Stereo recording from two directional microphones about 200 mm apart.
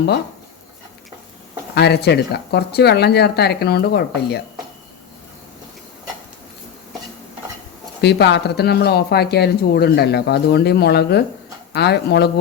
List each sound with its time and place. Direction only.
1.7 s speech: 55° left (ahead or behind)
8.0 s speech: 55° left (ahead or behind)